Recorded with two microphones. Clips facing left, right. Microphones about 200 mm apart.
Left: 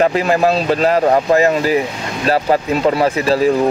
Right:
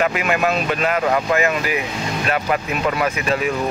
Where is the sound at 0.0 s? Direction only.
35° left (ahead or behind).